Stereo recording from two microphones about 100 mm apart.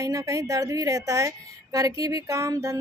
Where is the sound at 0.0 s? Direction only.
35° right (ahead or behind).